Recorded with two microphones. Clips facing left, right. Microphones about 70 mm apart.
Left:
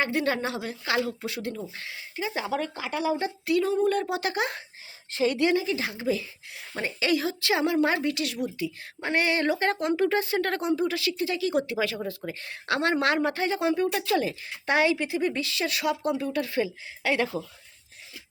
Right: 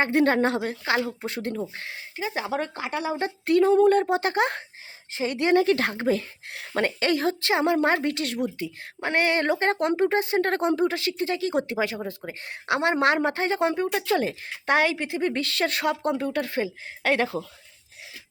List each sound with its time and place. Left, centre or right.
0.0 s a woman's voice: right
0.9 s a woman's voice: right
4.1 s a woman's voice: right
5.5 s a woman's voice: right
7.1 s a woman's voice: right
7.5 s a woman's voice: right
17.0 s a woman's voice: right